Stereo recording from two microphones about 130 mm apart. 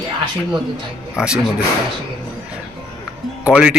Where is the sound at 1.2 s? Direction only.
5° right (ahead or behind).